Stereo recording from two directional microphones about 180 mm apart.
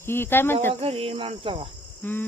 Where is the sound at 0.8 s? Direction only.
30° right (ahead or behind).